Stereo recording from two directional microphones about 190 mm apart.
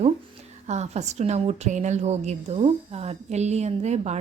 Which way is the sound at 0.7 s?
35° right (ahead or behind).